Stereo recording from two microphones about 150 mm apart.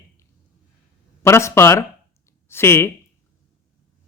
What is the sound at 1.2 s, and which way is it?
Speech, 20° left (ahead or behind).